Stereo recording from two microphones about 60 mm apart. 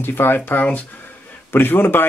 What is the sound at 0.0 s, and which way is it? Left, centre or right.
Speech, left.